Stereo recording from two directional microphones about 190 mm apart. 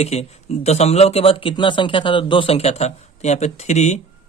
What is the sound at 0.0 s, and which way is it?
Speech, 35° left (ahead or behind).